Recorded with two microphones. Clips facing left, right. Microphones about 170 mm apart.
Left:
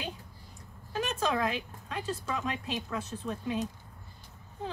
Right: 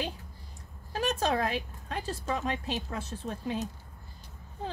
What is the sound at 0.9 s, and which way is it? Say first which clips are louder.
A woman's voice: right 2 dB; 35° right (ahead or behind).